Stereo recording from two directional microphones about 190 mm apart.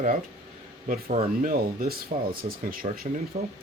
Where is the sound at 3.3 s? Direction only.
35° right (ahead or behind).